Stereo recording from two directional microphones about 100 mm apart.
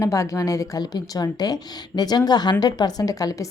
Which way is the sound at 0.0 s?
35° left (ahead or behind).